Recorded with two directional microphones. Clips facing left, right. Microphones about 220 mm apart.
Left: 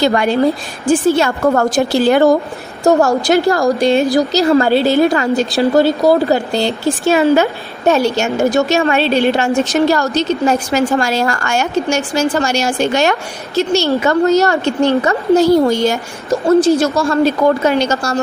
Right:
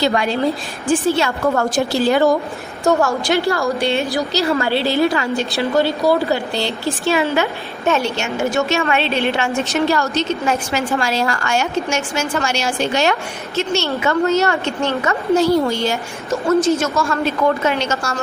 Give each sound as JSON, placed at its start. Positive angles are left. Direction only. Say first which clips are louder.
{"t": 0.0, "sound": "a woman's voice", "louder": "left 5 dB", "side_deg": 50}
{"t": 1.7, "sound": "speech", "louder": "left 4 dB", "side_deg": 80}
{"t": 3.2, "sound": "a woman's voice", "louder": "left 5 dB", "side_deg": 45}
{"t": 16.5, "sound": "a woman's voice", "louder": "left 5 dB", "side_deg": 30}